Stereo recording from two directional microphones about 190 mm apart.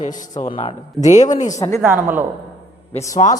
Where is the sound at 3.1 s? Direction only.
40° left (ahead or behind).